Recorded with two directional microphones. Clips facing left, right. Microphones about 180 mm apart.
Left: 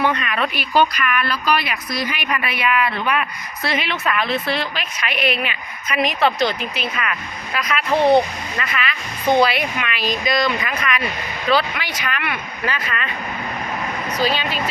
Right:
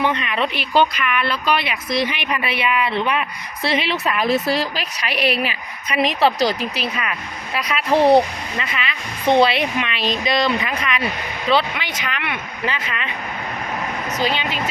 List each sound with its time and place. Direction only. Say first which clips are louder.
0.0 s a woman's voice: even; 20° right (ahead or behind)
9.4 s a woman's voice: right 1 dB; 30° right (ahead or behind)
14.2 s a woman's voice: left 1 dB; 20° right (ahead or behind)